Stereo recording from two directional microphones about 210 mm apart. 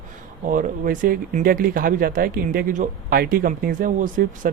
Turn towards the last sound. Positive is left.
turn(degrees=-40)  # may be behind; listen again after turning